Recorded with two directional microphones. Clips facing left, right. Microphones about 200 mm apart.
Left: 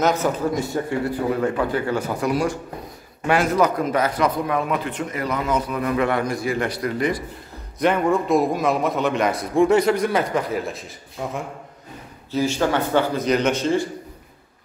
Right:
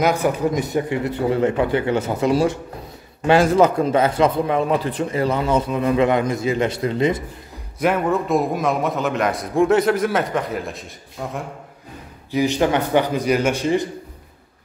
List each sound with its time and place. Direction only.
0.0 s a man's voice: 10° right (ahead or behind)
7.8 s a man's voice: 5° right (ahead or behind)
12.3 s a man's voice: 15° right (ahead or behind)